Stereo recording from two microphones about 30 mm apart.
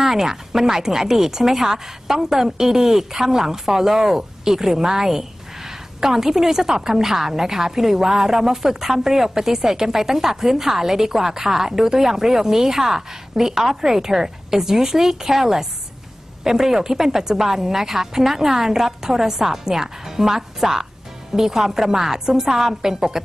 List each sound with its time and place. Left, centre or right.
0.0 s a woman's voice: centre